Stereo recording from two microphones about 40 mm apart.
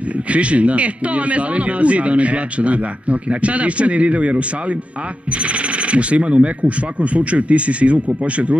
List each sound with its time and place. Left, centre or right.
0.3 s a man's voice: right